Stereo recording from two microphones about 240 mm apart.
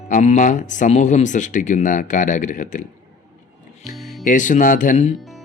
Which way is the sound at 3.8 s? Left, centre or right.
Left.